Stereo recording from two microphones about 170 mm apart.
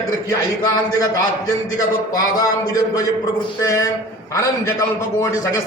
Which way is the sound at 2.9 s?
20° left (ahead or behind).